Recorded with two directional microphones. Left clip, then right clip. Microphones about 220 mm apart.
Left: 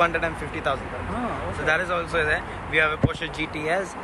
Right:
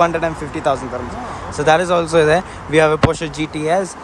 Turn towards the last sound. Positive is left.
turn(degrees=-20)  # may be behind; listen again after turning